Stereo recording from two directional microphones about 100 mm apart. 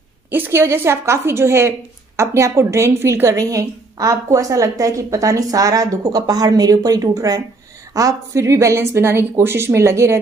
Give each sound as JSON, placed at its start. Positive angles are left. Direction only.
{"t": 0.3, "sound": "a woman's voice", "side_deg": -20}